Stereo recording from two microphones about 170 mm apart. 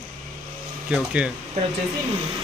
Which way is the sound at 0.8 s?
5° right (ahead or behind).